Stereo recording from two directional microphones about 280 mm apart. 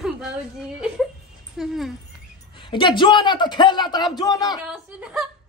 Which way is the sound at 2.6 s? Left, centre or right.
Centre.